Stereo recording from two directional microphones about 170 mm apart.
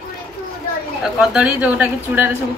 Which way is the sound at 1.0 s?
5° right (ahead or behind).